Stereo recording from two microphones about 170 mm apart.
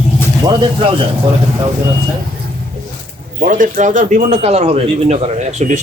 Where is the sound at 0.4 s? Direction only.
30° right (ahead or behind).